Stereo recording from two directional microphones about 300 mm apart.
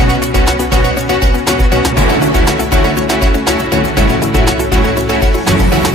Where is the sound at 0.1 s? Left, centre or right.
Centre.